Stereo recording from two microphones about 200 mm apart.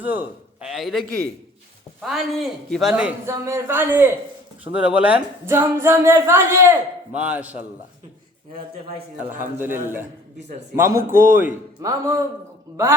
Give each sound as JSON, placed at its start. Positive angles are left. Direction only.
{"t": 0.0, "sound": "a man's voice", "side_deg": -10}
{"t": 8.5, "sound": "a man's voice", "side_deg": -30}
{"t": 9.2, "sound": "speech", "side_deg": -10}
{"t": 11.1, "sound": "a man's voice", "side_deg": -45}
{"t": 11.3, "sound": "speech", "side_deg": -15}